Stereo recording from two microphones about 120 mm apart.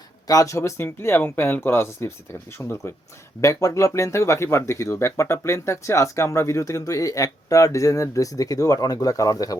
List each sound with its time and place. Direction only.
0.3 s speech: 30° left (ahead or behind)